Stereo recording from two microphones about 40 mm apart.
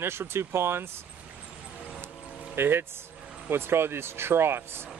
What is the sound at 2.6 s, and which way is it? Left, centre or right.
Speech, right.